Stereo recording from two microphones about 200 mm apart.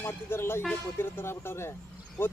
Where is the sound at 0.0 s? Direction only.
10° left (ahead or behind).